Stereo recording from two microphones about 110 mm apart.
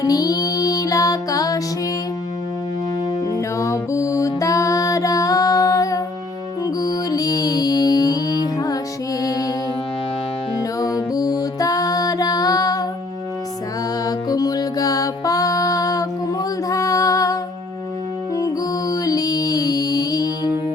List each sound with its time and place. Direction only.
0.0 s music: 35° left (ahead or behind)
3.2 s music: 30° left (ahead or behind)
10.6 s music: 35° left (ahead or behind)
14.0 s music: 35° left (ahead or behind)
18.3 s music: 30° left (ahead or behind)